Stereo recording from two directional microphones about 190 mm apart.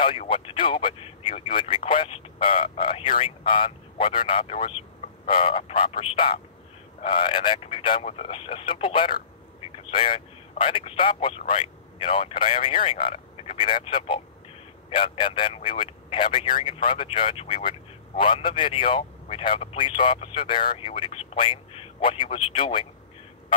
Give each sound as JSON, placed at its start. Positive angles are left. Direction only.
{"t": 0.3, "sound": "a man's voice", "side_deg": 25}